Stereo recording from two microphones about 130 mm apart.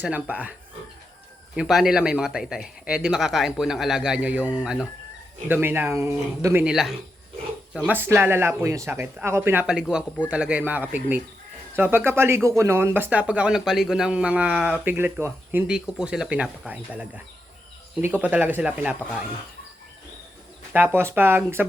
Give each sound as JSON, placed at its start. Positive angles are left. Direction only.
{"t": 0.0, "sound": "speech", "side_deg": -10}
{"t": 1.5, "sound": "speech", "side_deg": -5}
{"t": 5.5, "sound": "speech", "side_deg": -15}
{"t": 6.7, "sound": "speech", "side_deg": 0}
{"t": 7.9, "sound": "speech", "side_deg": -15}
{"t": 15.7, "sound": "speech", "side_deg": -5}
{"t": 20.7, "sound": "speech", "side_deg": -15}